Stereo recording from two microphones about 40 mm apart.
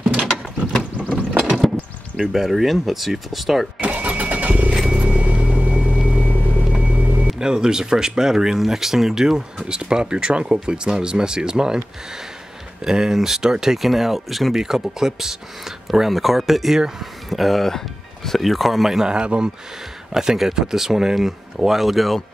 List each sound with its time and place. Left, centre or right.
1.1 s a sound: centre
2.3 s speech: centre
3.8 s vehicle: right
6.2 s vehicle: left
6.6 s vehicle: right
7.3 s speech: centre
12.8 s speech: centre
19.0 s speech: right
20.1 s speech: centre